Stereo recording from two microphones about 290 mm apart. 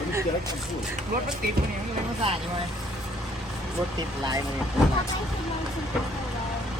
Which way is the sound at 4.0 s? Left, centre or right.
Centre.